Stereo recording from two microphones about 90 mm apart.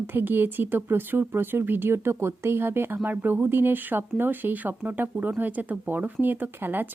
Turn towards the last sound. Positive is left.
turn(degrees=-25)  # may be behind; listen again after turning